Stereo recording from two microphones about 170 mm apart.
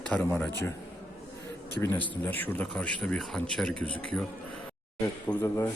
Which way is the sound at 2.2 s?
10° left (ahead or behind).